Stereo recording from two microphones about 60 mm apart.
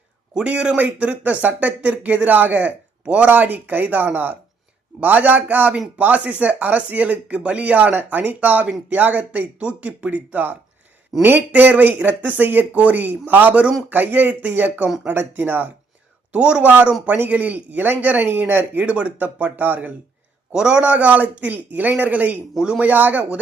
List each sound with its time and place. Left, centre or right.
0.3 s a man's voice: centre
16.3 s a man's voice: centre
20.5 s speech: centre